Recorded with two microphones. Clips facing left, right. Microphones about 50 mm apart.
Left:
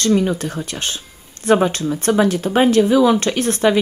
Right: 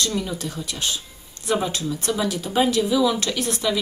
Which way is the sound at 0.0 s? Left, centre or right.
Left.